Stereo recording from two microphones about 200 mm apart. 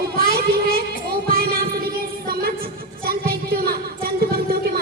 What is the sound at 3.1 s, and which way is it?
Music, 50° right (ahead or behind).